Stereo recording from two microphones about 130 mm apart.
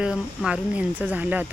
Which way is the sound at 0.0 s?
5° right (ahead or behind).